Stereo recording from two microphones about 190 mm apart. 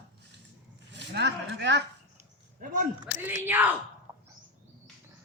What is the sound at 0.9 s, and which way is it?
Speech, 65° right (ahead or behind).